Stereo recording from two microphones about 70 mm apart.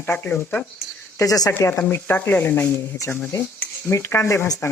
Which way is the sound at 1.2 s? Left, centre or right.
Left.